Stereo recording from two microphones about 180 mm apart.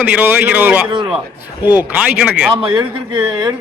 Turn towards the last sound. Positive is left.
turn(degrees=-25)  # may be behind; listen again after turning